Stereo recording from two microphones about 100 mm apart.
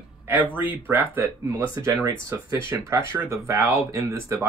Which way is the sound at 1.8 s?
30° right (ahead or behind).